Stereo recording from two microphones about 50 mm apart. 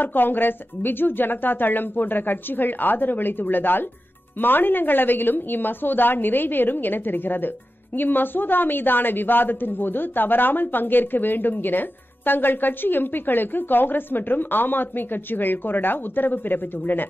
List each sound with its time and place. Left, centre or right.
0.0 s a woman's voice: left